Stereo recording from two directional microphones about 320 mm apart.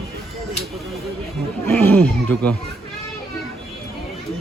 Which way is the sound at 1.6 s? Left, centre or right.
Centre.